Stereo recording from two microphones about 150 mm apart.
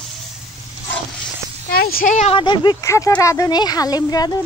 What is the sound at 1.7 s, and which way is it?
Speech, 85° left.